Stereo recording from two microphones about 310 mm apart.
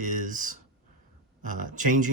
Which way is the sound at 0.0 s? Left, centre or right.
Right.